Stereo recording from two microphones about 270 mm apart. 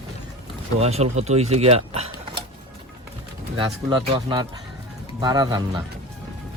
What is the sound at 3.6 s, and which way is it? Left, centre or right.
Speech, centre.